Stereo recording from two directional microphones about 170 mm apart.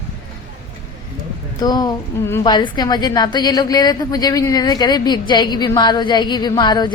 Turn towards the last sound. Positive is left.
turn(degrees=25)  # may be behind; listen again after turning